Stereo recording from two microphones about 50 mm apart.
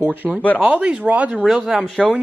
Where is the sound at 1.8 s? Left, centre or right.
Right.